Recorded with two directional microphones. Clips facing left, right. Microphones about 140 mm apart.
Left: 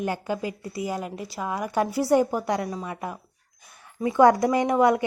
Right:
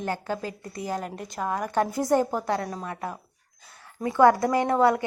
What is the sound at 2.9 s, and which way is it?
Speech, 15° left (ahead or behind).